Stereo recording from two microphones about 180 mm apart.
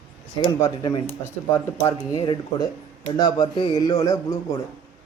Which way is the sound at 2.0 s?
20° left (ahead or behind).